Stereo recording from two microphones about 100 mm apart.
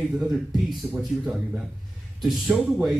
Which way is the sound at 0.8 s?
20° right (ahead or behind).